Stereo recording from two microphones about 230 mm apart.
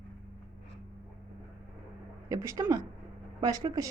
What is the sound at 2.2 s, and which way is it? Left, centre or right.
A woman's voice, centre.